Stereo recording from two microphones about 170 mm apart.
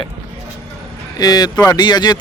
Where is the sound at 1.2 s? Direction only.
20° left (ahead or behind).